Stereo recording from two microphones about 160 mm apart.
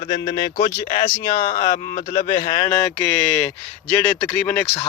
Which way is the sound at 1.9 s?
60° left (ahead or behind).